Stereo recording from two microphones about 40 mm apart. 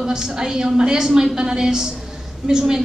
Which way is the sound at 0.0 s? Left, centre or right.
Centre.